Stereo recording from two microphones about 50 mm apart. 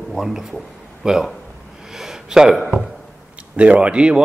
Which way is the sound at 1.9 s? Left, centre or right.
Centre.